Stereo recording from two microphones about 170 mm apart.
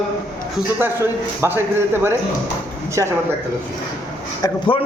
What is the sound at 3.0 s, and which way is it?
Speech, 20° right (ahead or behind).